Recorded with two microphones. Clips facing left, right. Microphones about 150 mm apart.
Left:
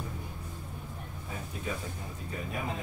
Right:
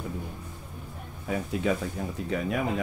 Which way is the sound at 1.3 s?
85° right.